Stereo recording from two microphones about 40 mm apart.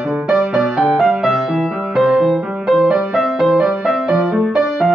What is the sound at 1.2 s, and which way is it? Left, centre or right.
Music, centre.